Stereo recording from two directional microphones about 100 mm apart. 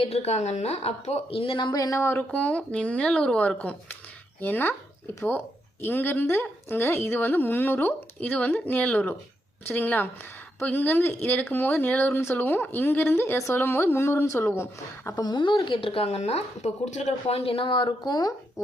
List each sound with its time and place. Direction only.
0.0 s a woman's voice: 90° left; by 2.0 s 40° left (ahead or behind)
2.0 s speech: 25° left (ahead or behind)
2.3 s speech: 15° left (ahead or behind)
5.8 s speech: 20° left (ahead or behind)
15.1 s a woman's voice: 45° left (ahead or behind)